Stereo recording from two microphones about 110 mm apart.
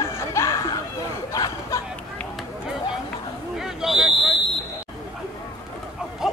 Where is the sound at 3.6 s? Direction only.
5° right (ahead or behind).